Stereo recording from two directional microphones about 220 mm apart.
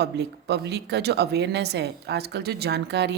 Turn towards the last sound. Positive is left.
turn(degrees=-50)  # may be behind; listen again after turning